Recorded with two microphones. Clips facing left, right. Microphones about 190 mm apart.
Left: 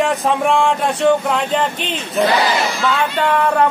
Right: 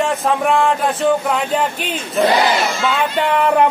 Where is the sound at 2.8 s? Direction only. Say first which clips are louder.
Even; 15° right (ahead or behind).